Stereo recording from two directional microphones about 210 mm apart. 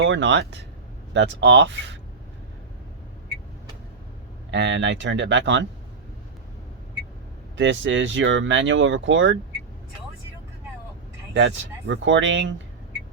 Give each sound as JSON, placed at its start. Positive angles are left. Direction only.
{"t": 0.0, "sound": "speech", "side_deg": -60}
{"t": 4.5, "sound": "speech", "side_deg": -60}
{"t": 7.5, "sound": "speech", "side_deg": -60}
{"t": 11.3, "sound": "speech", "side_deg": -60}